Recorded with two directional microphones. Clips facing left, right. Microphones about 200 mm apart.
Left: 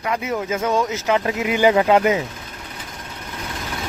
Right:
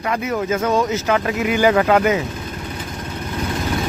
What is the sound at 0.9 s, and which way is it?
Speech, 20° left (ahead or behind).